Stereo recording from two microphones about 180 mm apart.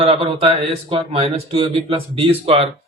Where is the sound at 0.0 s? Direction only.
35° right (ahead or behind).